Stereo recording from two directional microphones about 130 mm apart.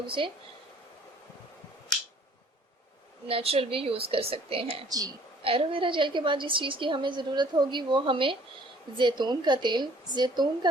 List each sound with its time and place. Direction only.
0.2 s a woman's voice: 40° right (ahead or behind)
3.2 s a woman's voice: 45° right (ahead or behind)
4.9 s a woman's voice: 30° right (ahead or behind)
5.4 s a woman's voice: 45° right (ahead or behind)